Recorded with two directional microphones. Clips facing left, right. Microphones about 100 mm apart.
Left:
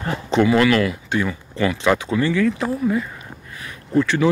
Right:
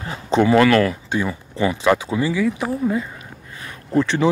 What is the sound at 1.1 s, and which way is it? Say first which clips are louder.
Speech: even; 20° right (ahead or behind).